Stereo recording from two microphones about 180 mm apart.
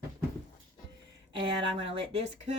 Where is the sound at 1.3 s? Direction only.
30° right (ahead or behind).